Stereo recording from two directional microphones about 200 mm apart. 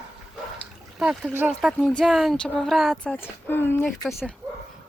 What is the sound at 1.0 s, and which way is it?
Speech, 5° right (ahead or behind).